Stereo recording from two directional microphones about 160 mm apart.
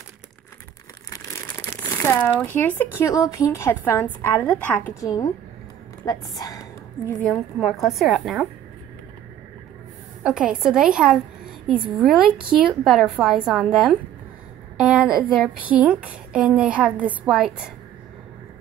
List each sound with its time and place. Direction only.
1.1 s crumpling: 15° left (ahead or behind)
1.8 s a woman's voice: 15° left (ahead or behind)
5.0 s a woman's voice: 20° left (ahead or behind)
7.2 s a woman's voice: centre (ahead or behind)
10.2 s a woman's voice: 5° right (ahead or behind)